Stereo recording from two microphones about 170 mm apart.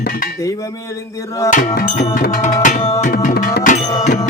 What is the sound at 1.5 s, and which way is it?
Music, 45° left (ahead or behind).